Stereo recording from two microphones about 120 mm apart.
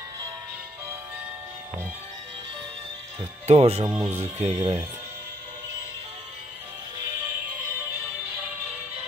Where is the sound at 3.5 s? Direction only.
55° right (ahead or behind).